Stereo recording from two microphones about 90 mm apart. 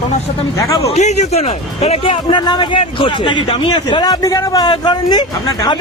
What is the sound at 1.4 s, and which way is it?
Speech, 90° left.